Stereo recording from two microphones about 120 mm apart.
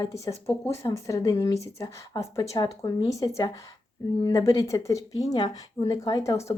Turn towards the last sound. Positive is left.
turn(degrees=25)  # may be behind; listen again after turning